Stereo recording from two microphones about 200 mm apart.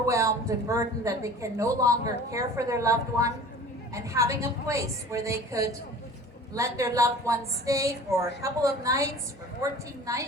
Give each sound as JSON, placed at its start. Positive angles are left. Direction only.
{"t": 0.0, "sound": "speech", "side_deg": -15}